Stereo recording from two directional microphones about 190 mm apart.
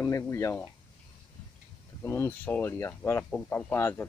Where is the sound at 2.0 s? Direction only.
15° left (ahead or behind).